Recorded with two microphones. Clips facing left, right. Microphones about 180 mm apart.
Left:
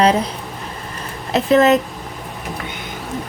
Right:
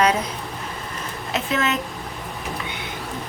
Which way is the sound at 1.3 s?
35° left (ahead or behind).